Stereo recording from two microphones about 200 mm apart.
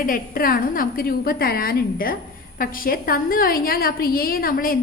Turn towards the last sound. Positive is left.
turn(degrees=45)  # may be behind; listen again after turning